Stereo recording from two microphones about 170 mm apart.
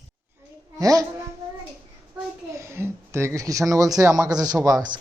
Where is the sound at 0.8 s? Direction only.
20° right (ahead or behind).